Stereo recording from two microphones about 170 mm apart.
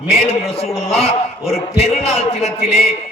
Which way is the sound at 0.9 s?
35° left (ahead or behind).